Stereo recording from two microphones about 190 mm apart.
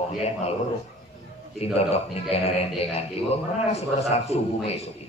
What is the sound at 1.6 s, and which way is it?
Speech, 35° left (ahead or behind).